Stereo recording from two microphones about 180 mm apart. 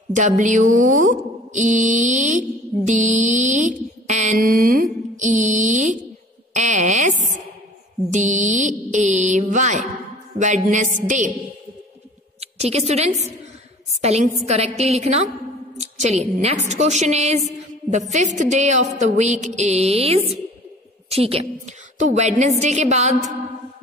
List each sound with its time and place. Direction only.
0.1 s speech: 45° right (ahead or behind)
6.5 s a sound: 40° right (ahead or behind)
8.1 s mantra: 40° right (ahead or behind)
10.4 s a woman's voice: 45° right (ahead or behind)
12.4 s a woman's voice: 35° right (ahead or behind)